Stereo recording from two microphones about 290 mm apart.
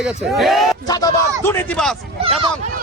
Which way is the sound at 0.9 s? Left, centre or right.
Centre.